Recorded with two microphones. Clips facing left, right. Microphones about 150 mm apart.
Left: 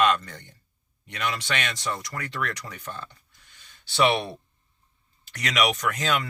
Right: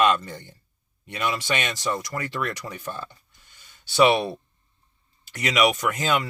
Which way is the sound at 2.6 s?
20° right (ahead or behind).